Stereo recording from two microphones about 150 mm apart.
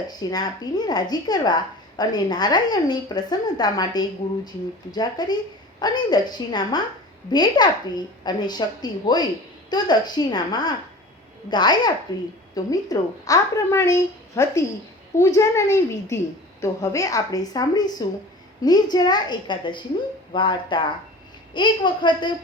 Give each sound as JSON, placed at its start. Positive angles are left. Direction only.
{"t": 0.1, "sound": "a woman's voice", "side_deg": 25}